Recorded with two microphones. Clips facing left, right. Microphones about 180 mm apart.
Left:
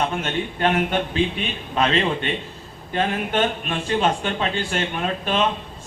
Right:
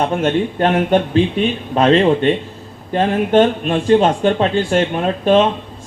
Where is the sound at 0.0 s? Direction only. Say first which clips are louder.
Right 8 dB; 45° right (ahead or behind).